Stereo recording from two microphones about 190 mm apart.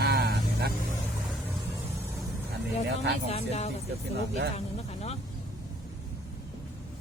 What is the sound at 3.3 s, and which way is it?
Speech, 35° left (ahead or behind).